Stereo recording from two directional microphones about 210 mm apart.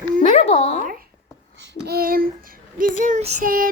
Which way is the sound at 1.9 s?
45° right (ahead or behind).